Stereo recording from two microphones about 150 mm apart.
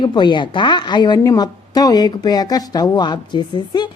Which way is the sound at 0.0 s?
30° left (ahead or behind).